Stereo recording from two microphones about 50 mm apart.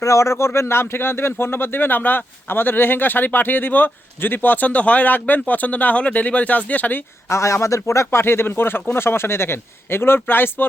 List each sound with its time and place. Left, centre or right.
0.0 s speech: left
7.3 s speech: left
8.2 s speech: left